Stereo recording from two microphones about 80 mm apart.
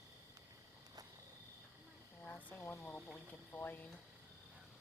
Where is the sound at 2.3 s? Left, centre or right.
Centre.